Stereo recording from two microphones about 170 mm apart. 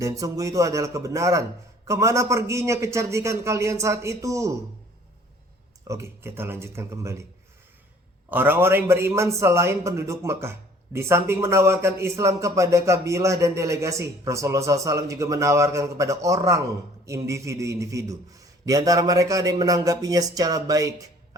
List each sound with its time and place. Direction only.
0.0 s a man's voice: 20° right (ahead or behind)
5.9 s a man's voice: 15° right (ahead or behind)
8.3 s a man's voice: 10° right (ahead or behind)